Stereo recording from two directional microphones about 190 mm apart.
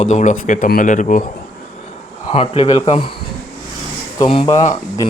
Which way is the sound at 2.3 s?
35° left (ahead or behind).